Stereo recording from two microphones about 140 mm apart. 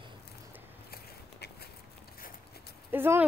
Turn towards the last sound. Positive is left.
turn(degrees=-15)  # may be behind; listen again after turning